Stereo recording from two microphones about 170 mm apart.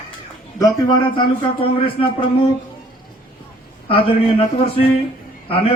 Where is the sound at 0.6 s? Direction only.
20° left (ahead or behind).